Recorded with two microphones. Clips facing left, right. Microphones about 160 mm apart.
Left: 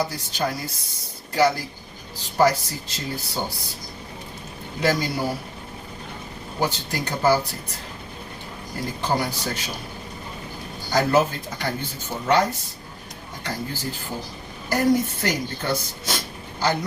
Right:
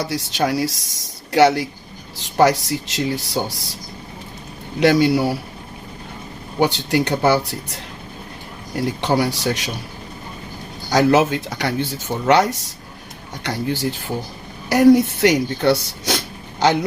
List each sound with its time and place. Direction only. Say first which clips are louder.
0.0 s speech: right 4 dB; 85° right
4.8 s speech: right 8 dB; 75° right (ahead or behind)
6.6 s speech: right 8 dB; 75° right (ahead or behind)
9.0 s speech: right 4 dB; 80° right
10.9 s speech: right 5 dB; 80° right